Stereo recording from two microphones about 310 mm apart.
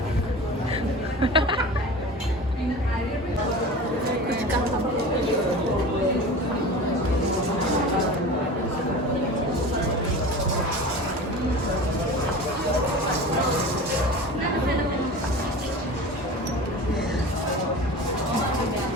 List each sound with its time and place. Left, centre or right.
1.2 s speech: centre